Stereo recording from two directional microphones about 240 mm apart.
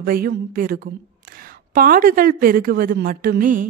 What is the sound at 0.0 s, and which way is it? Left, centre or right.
A woman's voice, right.